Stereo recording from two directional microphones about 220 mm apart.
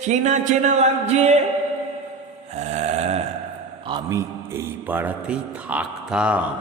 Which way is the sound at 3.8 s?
20° right (ahead or behind).